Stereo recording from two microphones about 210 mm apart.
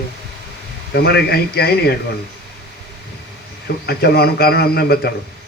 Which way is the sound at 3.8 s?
50° left (ahead or behind).